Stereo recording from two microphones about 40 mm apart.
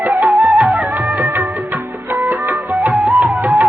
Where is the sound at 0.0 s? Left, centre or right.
Right.